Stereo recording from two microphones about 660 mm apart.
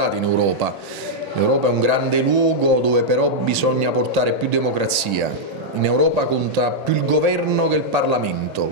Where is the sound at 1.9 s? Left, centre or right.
Right.